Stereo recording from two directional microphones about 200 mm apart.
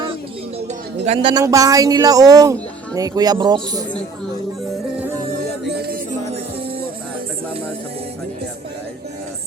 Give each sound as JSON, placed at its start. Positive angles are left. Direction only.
{"t": 1.0, "sound": "a man's voice", "side_deg": -25}